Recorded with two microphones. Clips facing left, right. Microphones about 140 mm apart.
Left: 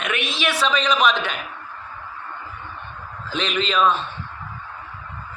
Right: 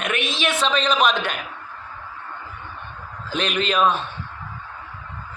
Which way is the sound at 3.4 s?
45° right (ahead or behind).